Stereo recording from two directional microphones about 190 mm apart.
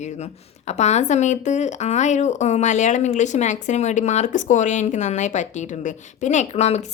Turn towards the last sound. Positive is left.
turn(degrees=35)  # may be behind; listen again after turning